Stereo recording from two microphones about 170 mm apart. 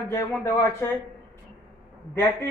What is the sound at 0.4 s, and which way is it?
Speech, 15° left (ahead or behind).